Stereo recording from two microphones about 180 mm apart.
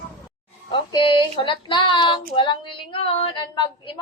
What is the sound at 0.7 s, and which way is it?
Female singing, 25° left (ahead or behind).